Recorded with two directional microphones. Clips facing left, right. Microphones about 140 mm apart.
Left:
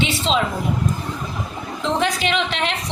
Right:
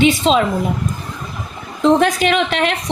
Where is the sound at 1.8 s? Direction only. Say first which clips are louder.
Right 8 dB; 50° right (ahead or behind).